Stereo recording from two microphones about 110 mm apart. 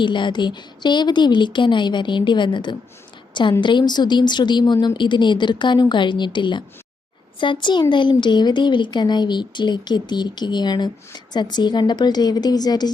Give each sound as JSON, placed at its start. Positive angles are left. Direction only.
{"t": 0.0, "sound": "a woman's voice", "side_deg": 45}